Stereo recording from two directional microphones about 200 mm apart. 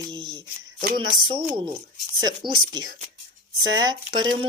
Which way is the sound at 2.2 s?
20° right (ahead or behind).